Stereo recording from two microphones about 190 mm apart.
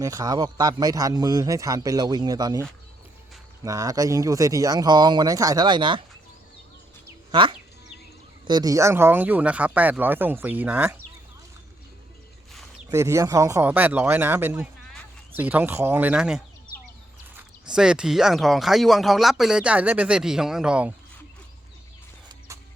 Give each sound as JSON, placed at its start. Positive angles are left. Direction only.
{"t": 0.0, "sound": "a man's voice", "side_deg": -15}
{"t": 7.3, "sound": "speech", "side_deg": -25}
{"t": 12.9, "sound": "speech", "side_deg": -15}